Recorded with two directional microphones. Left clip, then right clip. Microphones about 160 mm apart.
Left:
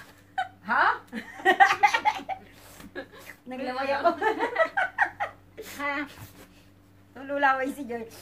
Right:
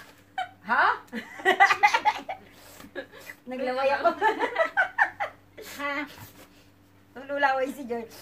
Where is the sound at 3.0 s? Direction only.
Centre (ahead or behind).